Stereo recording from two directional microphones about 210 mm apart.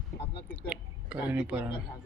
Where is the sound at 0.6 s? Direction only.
5° right (ahead or behind).